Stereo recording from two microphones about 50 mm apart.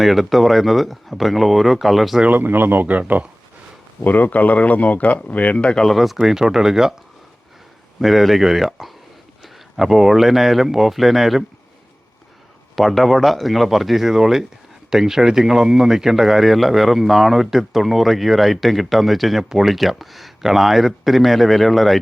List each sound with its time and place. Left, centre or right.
0.0 s speech: centre
2.3 s speech: right
4.0 s speech: left
5.8 s speech: centre
8.0 s speech: centre
12.7 s speech: centre